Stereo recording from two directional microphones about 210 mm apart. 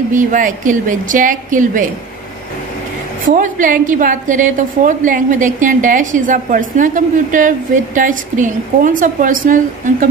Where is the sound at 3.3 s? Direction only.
40° right (ahead or behind).